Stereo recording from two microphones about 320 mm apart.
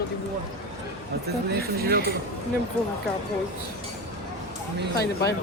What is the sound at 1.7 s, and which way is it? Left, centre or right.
Speech, right.